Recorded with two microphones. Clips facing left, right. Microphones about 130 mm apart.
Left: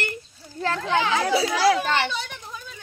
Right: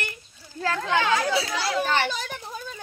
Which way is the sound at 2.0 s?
40° right (ahead or behind).